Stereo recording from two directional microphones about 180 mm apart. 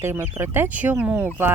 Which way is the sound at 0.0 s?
15° right (ahead or behind).